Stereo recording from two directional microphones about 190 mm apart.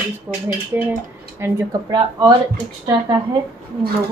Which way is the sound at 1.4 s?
20° right (ahead or behind).